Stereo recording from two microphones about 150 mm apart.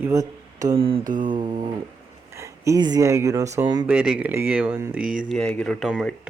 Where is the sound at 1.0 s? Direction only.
65° right (ahead or behind).